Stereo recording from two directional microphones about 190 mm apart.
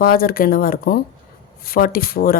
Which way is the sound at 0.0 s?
50° left (ahead or behind).